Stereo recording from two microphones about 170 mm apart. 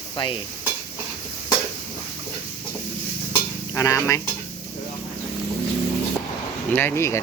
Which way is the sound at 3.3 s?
20° left (ahead or behind).